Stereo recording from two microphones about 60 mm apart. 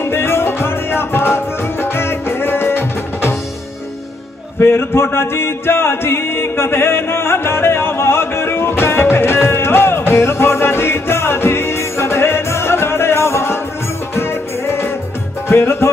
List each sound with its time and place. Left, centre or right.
0.0 s music: left
4.6 s music: left